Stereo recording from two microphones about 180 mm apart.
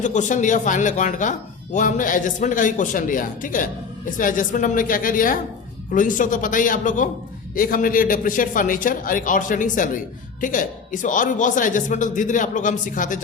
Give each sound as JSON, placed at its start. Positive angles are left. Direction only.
{"t": 0.0, "sound": "speech", "side_deg": 45}